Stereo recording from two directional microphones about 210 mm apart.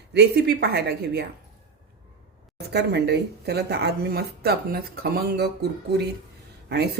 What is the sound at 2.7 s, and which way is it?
Speech, 50° right (ahead or behind).